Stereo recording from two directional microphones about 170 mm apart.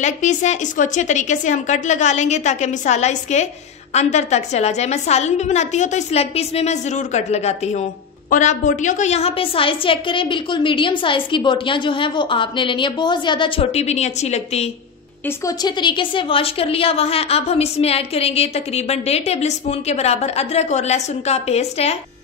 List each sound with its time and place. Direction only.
0.0 s a woman's voice: 45° left (ahead or behind)
15.2 s a woman's voice: 20° left (ahead or behind); by 21.9 s 40° left (ahead or behind)